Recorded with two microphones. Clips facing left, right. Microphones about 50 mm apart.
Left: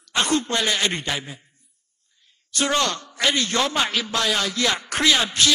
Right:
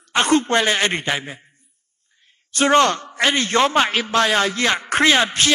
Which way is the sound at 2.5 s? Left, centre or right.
Right.